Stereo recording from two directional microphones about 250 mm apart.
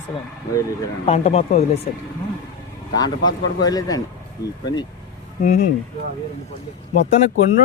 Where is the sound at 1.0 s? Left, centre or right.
Left.